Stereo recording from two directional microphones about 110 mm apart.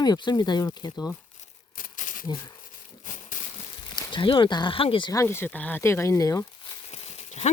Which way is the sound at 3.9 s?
45° left (ahead or behind).